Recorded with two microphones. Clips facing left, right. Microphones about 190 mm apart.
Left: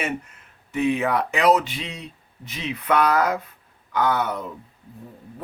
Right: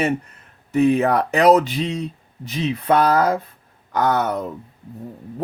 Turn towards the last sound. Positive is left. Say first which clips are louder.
# right 3 dB
turn(degrees=-40)  # may be behind; listen again after turning